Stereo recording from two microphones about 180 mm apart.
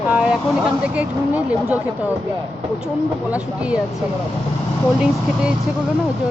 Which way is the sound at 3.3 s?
5° right (ahead or behind).